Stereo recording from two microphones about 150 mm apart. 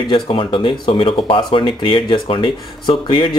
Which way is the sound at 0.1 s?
35° left (ahead or behind).